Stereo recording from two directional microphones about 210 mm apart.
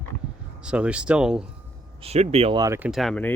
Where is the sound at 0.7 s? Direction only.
5° right (ahead or behind).